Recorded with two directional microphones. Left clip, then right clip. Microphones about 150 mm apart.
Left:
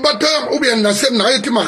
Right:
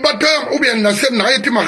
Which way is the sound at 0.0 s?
20° left (ahead or behind).